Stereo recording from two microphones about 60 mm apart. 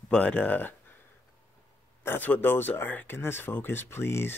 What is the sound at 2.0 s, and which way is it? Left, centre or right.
Speech, left.